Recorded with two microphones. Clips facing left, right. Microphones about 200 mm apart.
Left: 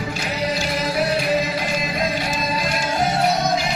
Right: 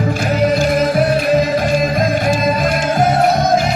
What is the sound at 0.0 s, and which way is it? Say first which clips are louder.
Music: right 9 dB; 50° right (ahead or behind).